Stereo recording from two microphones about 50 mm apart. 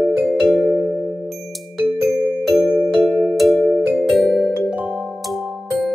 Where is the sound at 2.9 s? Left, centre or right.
Centre.